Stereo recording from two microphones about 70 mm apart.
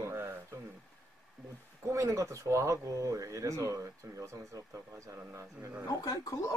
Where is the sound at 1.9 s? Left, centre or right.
Right.